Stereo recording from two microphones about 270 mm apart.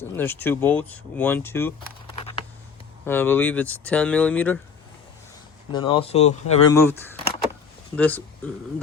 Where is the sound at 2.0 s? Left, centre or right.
Left.